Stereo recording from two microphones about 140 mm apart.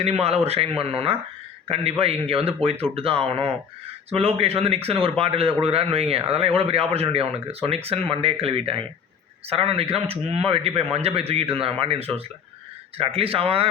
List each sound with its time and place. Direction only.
0.0 s speech: 50° right (ahead or behind)